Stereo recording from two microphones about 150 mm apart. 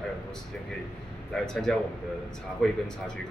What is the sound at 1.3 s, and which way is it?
Speech, 5° left (ahead or behind).